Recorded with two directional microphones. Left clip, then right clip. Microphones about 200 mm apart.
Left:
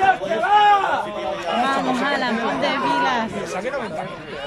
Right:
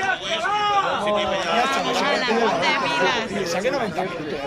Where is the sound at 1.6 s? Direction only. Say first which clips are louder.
Even; 40° left (ahead or behind).